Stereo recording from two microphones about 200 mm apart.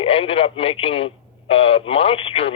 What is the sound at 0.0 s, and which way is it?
Speech, 30° left (ahead or behind).